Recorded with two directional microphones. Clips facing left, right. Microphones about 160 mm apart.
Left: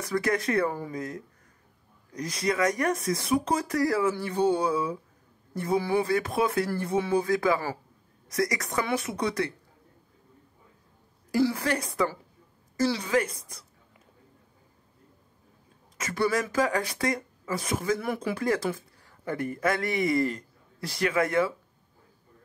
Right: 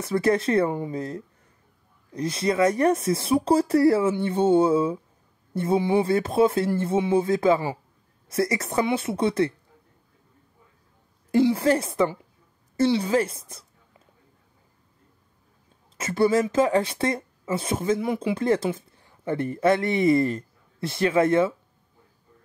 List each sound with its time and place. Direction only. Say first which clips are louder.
0.0 s speech: right 5 dB; 30° right (ahead or behind)
11.3 s speech: right 6 dB; 25° right (ahead or behind)
16.0 s speech: right 6 dB; 25° right (ahead or behind)